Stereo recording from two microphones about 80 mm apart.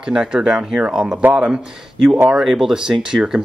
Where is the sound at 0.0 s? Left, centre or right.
Centre.